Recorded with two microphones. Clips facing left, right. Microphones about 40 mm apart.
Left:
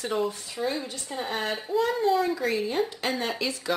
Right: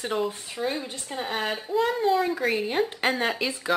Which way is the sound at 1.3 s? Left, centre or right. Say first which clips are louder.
Right 1 dB; centre.